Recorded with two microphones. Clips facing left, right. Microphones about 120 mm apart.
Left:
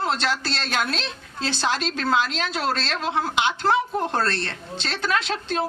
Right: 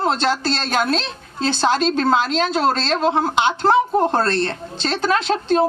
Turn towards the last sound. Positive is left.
turn(degrees=-35)  # may be behind; listen again after turning